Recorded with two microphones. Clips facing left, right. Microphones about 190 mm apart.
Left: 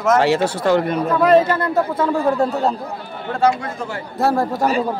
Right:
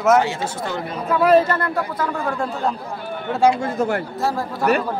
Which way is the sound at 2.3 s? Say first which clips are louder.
Left 5 dB; 40° left (ahead or behind).